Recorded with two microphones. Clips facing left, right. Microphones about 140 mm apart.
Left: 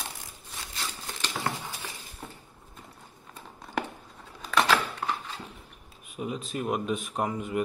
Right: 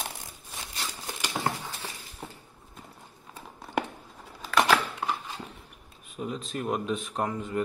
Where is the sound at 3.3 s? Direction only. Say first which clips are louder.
Right 2 dB; 5° right (ahead or behind).